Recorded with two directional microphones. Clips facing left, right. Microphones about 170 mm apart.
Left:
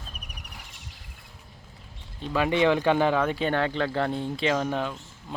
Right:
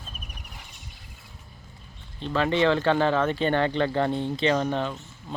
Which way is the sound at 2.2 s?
10° left (ahead or behind).